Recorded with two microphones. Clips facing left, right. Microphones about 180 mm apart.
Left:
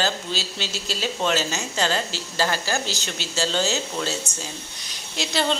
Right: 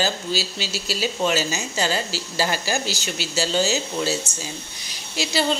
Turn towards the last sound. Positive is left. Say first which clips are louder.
# right 1 dB
turn(degrees=-5)  # may be behind; listen again after turning